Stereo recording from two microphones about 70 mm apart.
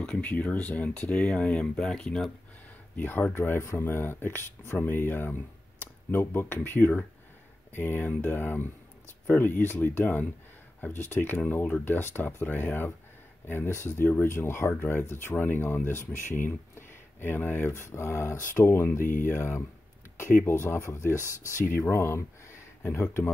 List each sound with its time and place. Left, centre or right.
0.0 s speech: centre
3.0 s speech: left
13.7 s speech: left